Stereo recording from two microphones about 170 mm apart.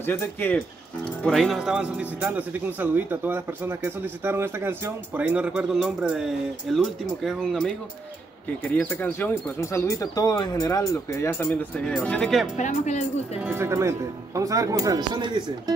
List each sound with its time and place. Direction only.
0.0 s speech: 15° left (ahead or behind)
1.2 s speech: centre (ahead or behind)
12.5 s speech: 45° left (ahead or behind)
13.4 s speech: 10° right (ahead or behind)